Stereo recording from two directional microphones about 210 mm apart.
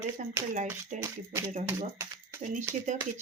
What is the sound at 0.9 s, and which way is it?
Speech, 35° right (ahead or behind).